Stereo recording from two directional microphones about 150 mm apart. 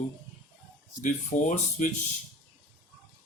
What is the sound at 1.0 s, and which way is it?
Speech, 55° left (ahead or behind).